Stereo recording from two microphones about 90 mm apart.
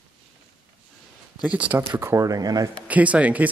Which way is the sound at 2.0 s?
35° right (ahead or behind).